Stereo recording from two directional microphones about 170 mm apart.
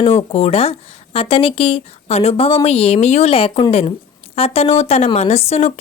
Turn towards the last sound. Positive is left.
turn(degrees=40)  # may be behind; listen again after turning